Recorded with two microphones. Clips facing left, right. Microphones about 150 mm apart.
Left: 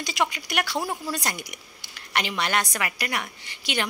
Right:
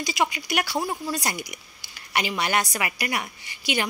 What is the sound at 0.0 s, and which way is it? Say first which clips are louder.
Speech: right 1 dB; 5° right (ahead or behind).